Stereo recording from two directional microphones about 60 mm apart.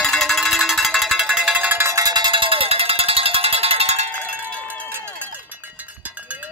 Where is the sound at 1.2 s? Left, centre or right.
Centre.